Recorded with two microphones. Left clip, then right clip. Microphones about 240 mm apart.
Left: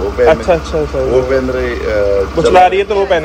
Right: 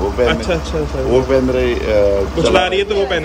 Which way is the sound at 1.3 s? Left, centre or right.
Right.